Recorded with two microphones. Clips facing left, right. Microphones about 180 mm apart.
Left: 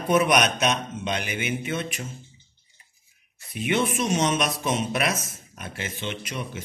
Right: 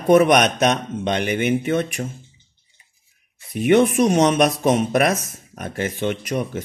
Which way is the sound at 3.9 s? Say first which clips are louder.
Right 8 dB; 50° right (ahead or behind).